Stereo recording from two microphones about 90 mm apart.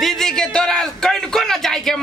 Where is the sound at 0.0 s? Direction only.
5° left (ahead or behind).